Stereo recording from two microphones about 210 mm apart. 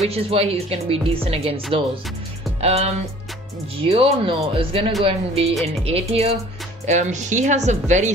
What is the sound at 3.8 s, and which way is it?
Speech, 25° right (ahead or behind).